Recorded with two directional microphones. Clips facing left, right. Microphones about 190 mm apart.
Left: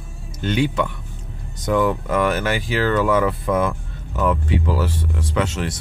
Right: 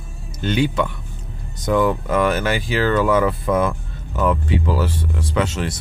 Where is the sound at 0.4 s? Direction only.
30° right (ahead or behind).